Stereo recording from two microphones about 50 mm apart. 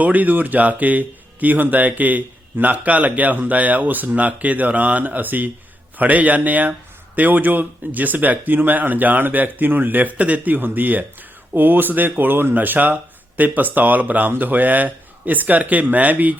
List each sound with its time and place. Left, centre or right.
0.0 s speech: right